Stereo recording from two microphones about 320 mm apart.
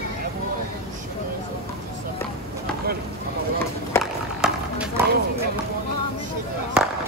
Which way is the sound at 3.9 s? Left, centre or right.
Centre.